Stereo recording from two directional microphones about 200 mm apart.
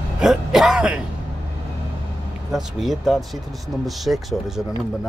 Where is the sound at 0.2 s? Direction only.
Centre (ahead or behind).